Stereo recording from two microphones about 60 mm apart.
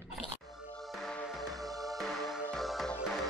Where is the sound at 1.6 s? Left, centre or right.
Right.